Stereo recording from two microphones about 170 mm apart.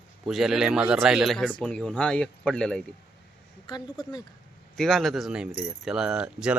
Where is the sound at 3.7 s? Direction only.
30° left (ahead or behind).